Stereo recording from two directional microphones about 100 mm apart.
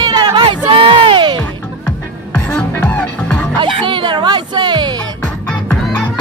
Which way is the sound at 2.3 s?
20° left (ahead or behind).